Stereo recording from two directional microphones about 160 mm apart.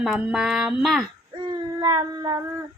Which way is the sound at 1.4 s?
25° right (ahead or behind).